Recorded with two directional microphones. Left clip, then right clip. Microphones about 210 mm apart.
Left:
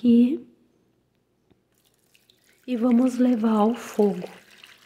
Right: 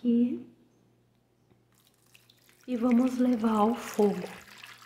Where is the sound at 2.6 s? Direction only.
30° left (ahead or behind).